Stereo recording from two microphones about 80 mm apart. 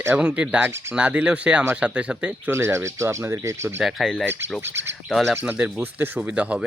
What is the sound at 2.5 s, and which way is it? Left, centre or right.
Speech, right.